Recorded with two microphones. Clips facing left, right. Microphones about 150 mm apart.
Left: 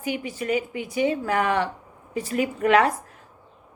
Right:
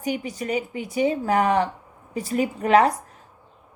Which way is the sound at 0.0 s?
40° right (ahead or behind).